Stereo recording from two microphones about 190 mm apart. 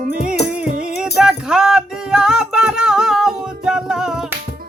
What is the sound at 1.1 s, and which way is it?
Music, 5° right (ahead or behind).